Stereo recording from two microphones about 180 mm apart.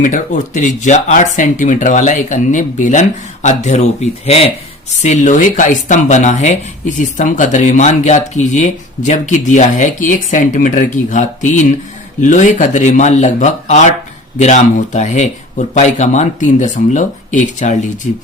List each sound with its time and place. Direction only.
0.0 s speech: 45° left (ahead or behind)